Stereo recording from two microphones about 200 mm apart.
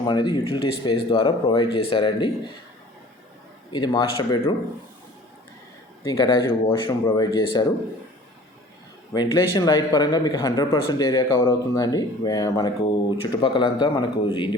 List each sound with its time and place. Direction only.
0.0 s speech: 20° left (ahead or behind)
3.7 s speech: 20° left (ahead or behind)
6.1 s speech: 20° left (ahead or behind)
9.1 s speech: 20° left (ahead or behind)